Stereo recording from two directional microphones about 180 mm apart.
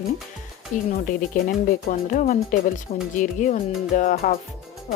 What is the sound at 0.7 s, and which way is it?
Speech, 45° left (ahead or behind).